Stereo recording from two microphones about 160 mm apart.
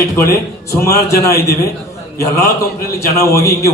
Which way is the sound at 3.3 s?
20° left (ahead or behind).